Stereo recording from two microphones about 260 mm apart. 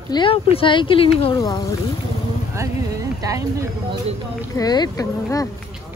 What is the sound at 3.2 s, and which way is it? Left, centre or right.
Speech, centre.